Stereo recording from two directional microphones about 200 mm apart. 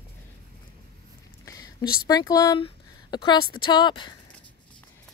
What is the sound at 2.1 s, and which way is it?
A woman's voice, 20° left (ahead or behind).